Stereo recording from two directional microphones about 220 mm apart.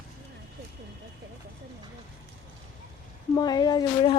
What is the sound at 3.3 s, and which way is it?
Speech, 20° left (ahead or behind).